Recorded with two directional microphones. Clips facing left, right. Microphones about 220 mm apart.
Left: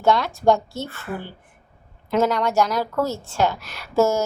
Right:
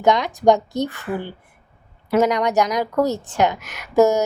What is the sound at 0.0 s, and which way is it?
A woman's voice, 15° right (ahead or behind).